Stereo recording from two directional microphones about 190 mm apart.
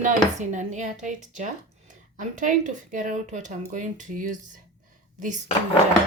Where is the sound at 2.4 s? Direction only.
40° right (ahead or behind).